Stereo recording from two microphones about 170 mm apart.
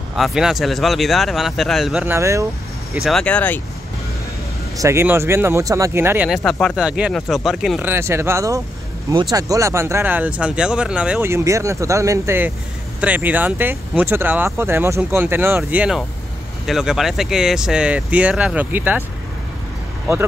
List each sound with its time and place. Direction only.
0.1 s speech: centre (ahead or behind)
2.0 s speech: 15° right (ahead or behind)
3.0 s speech: centre (ahead or behind)
4.7 s speech: 15° right (ahead or behind); by 7.8 s centre (ahead or behind)
7.8 s speech: 15° right (ahead or behind)